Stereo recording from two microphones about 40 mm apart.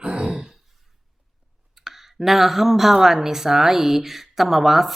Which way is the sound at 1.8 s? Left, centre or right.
Centre.